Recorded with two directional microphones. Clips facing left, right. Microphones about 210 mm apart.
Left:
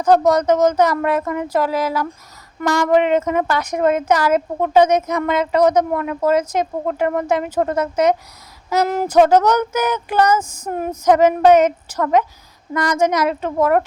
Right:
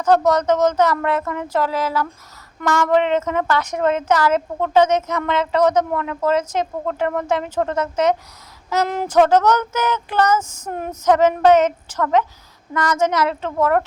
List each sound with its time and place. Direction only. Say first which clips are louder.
0.0 s a woman's voice: left 2 dB; 10° left (ahead or behind)